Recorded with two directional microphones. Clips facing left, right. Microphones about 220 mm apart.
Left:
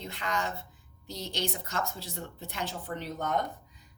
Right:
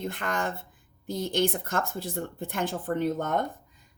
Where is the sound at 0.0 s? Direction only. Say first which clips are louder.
Right 4 dB; 50° right (ahead or behind).